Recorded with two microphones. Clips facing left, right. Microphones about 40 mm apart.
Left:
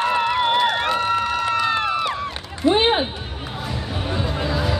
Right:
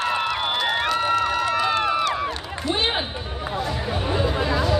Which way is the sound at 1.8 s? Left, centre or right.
Centre.